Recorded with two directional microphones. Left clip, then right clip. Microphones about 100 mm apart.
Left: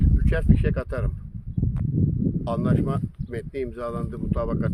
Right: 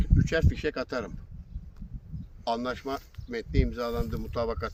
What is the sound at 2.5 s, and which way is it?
Speech, 40° left (ahead or behind).